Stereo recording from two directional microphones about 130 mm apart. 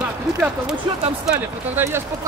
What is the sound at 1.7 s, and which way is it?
Speech, 20° right (ahead or behind).